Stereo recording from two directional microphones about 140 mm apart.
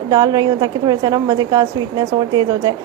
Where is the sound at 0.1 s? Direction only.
30° right (ahead or behind).